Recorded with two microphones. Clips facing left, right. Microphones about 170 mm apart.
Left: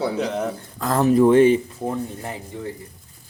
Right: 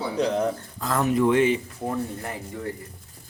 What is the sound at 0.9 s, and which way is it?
Speech, 35° left (ahead or behind).